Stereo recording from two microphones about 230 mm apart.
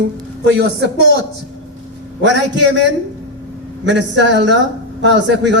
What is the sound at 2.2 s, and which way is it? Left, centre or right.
Speech, right.